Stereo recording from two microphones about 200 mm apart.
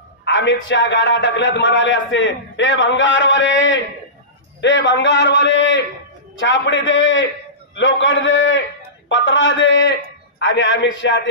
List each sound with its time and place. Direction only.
0.2 s a man's voice: 65° left (ahead or behind)